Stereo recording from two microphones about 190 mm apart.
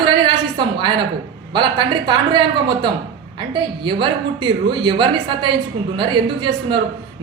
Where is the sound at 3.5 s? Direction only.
25° right (ahead or behind).